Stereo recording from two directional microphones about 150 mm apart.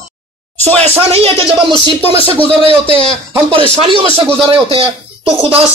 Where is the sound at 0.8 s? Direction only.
40° right (ahead or behind).